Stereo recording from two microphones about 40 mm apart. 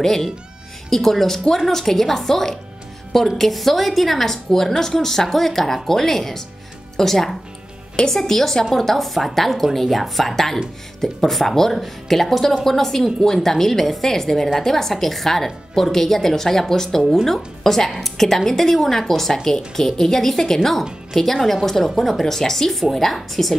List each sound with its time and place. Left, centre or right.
0.0 s a woman's voice: centre